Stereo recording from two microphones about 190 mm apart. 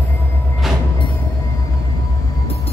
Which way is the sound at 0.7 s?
Centre (ahead or behind).